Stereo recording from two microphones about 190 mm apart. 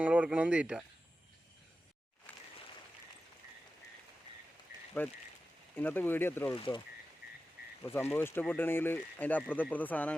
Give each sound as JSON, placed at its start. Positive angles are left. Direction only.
{"t": 0.0, "sound": "speech", "side_deg": -5}
{"t": 2.3, "sound": "a sound", "side_deg": 10}
{"t": 5.0, "sound": "speech", "side_deg": 10}
{"t": 6.5, "sound": "speech", "side_deg": 25}
{"t": 7.9, "sound": "speech", "side_deg": 10}